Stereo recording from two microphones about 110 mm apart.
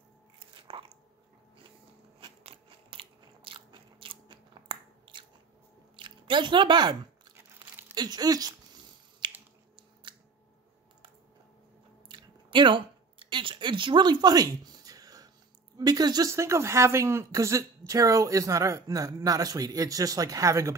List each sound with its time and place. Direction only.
0.4 s biting: 50° right (ahead or behind)
2.1 s biting: 55° right (ahead or behind)
5.9 s chewing: 45° right (ahead or behind)
7.9 s speech: 35° right (ahead or behind)
9.2 s finger snapping: 45° right (ahead or behind)
12.1 s a sound: 45° right (ahead or behind)
15.8 s speech: 35° right (ahead or behind)